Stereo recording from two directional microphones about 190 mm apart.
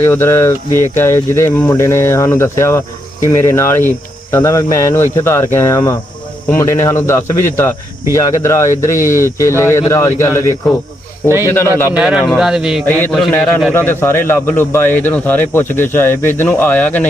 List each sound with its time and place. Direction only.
0.0 s a man's voice: 15° left (ahead or behind)
11.4 s a man's voice: 15° left (ahead or behind)
11.9 s speech: 5° right (ahead or behind)
12.8 s a man's voice: 10° left (ahead or behind)